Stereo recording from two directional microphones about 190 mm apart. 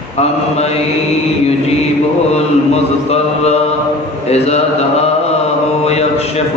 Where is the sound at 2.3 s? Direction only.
35° left (ahead or behind).